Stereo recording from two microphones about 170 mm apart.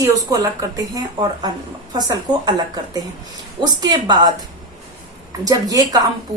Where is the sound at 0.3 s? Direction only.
20° right (ahead or behind).